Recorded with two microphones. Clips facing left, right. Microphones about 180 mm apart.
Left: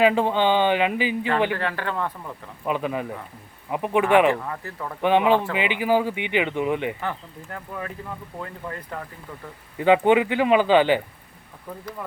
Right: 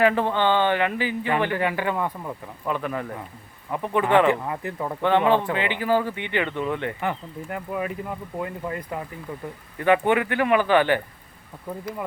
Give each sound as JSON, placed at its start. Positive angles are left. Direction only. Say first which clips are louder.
{"t": 0.0, "sound": "speech", "louder": "left 1 dB", "side_deg": 15}
{"t": 1.5, "sound": "speech", "louder": "right 3 dB", "side_deg": -10}
{"t": 2.6, "sound": "speech", "louder": "left 2 dB", "side_deg": 15}
{"t": 4.3, "sound": "speech", "louder": "right 1 dB", "side_deg": -20}
{"t": 5.0, "sound": "speech", "louder": "left 1 dB", "side_deg": 15}
{"t": 7.0, "sound": "speech", "louder": "right 3 dB", "side_deg": -15}
{"t": 9.7, "sound": "speech", "louder": "left 3 dB", "side_deg": 20}